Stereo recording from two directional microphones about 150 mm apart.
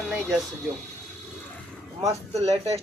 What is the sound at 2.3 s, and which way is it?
Speech, 45° right (ahead or behind).